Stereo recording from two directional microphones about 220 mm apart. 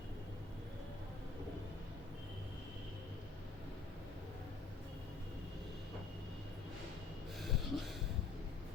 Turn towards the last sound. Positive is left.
turn(degrees=0)  # may be behind; listen again after turning